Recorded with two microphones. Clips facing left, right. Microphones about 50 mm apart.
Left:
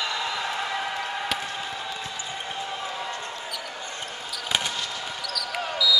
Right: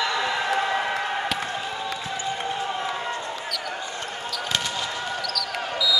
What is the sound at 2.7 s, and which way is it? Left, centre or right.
Basketball bounce, right.